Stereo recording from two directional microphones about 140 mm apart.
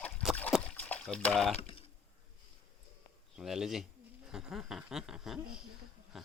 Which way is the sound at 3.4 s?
5° right (ahead or behind).